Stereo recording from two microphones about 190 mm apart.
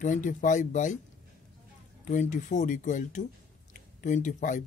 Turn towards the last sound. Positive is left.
turn(degrees=40)  # may be behind; listen again after turning